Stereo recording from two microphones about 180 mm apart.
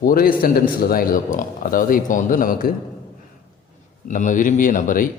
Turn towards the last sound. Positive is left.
turn(degrees=50)  # may be behind; listen again after turning